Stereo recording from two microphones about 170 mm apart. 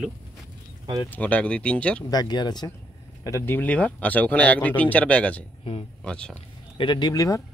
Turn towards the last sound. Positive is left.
turn(degrees=20)  # may be behind; listen again after turning